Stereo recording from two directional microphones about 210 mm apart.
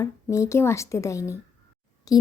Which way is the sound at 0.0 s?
15° left (ahead or behind).